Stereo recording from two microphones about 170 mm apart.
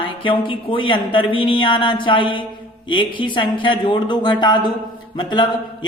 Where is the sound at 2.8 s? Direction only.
30° left (ahead or behind).